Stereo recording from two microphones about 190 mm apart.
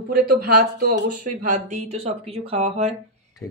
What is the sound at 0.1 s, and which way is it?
Speech, 55° right (ahead or behind).